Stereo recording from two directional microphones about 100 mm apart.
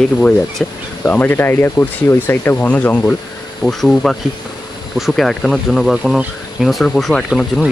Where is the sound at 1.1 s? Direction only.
20° left (ahead or behind).